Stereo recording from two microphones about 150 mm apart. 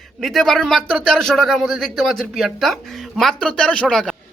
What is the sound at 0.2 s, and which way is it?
Speech, centre (ahead or behind).